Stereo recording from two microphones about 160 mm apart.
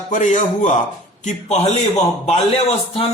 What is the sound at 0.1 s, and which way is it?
A man's voice, 50° left (ahead or behind).